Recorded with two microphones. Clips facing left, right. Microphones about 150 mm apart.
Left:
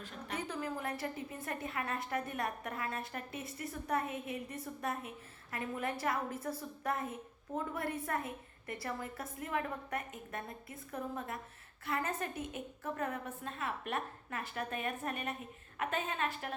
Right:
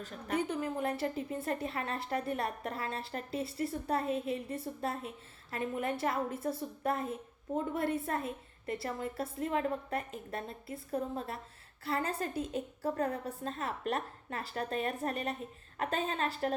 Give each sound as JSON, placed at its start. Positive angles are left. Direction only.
{"t": 0.0, "sound": "a woman's voice", "side_deg": -35}